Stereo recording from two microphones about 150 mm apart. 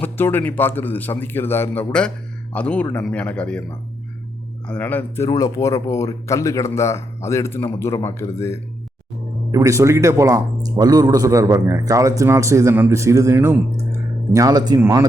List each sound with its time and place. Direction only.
0.0 s a man's voice: 15° left (ahead or behind)
4.7 s speech: 10° left (ahead or behind)
9.5 s speech: 20° right (ahead or behind)